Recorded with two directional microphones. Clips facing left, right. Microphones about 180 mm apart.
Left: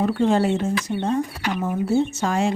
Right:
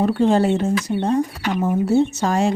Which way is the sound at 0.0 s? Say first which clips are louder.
Right 3 dB; 35° right (ahead or behind).